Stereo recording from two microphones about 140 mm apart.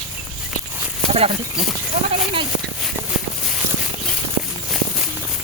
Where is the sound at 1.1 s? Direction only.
45° right (ahead or behind).